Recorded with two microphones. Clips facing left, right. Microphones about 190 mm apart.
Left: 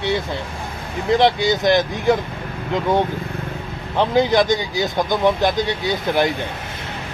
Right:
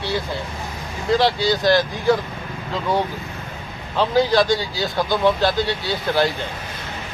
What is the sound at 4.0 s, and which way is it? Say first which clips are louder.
Speech: left 1 dB; 20° left (ahead or behind).